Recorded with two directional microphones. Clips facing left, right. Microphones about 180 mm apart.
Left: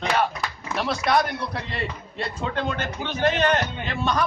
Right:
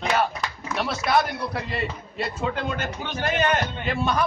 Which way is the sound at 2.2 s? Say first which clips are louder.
Even; 5° right (ahead or behind).